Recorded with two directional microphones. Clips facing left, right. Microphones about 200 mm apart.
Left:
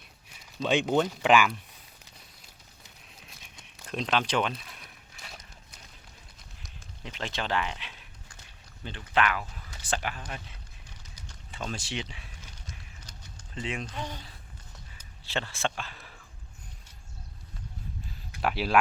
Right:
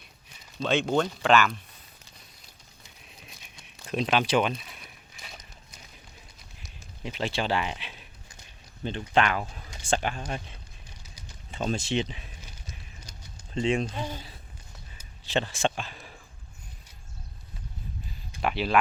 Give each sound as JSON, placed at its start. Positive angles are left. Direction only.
{"t": 0.3, "sound": "speech", "side_deg": 10}
{"t": 3.8, "sound": "a sound", "side_deg": -10}
{"t": 7.0, "sound": "a sound", "side_deg": -10}
{"t": 9.8, "sound": "speech", "side_deg": -25}
{"t": 11.9, "sound": "a sound", "side_deg": -25}
{"t": 13.5, "sound": "speech", "side_deg": -25}
{"t": 14.0, "sound": "speech", "side_deg": -5}
{"t": 15.2, "sound": "speech", "side_deg": -20}
{"t": 18.4, "sound": "speech", "side_deg": 5}